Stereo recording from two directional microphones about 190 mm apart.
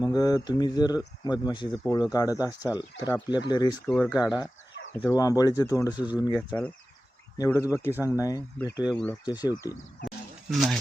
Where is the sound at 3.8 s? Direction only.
10° left (ahead or behind).